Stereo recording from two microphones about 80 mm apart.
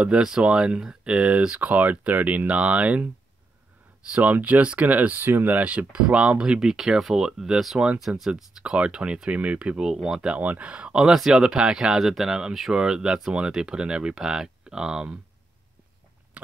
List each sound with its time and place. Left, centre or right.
0.0 s speech: centre
4.1 s speech: centre